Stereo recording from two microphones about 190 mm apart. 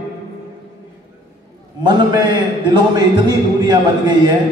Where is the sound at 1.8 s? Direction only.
25° right (ahead or behind).